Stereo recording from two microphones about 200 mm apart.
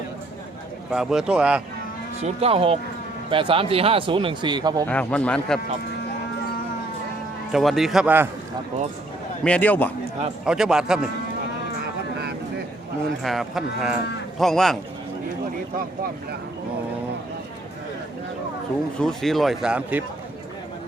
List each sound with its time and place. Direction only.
0.9 s speech: 5° right (ahead or behind)
2.2 s speech: 30° right (ahead or behind)
4.9 s a man's voice: 5° left (ahead or behind)
7.5 s speech: centre (ahead or behind)
9.4 s a man's voice: 5° left (ahead or behind)
10.4 s speech: 5° right (ahead or behind)
13.2 s speech: centre (ahead or behind)
18.9 s speech: centre (ahead or behind)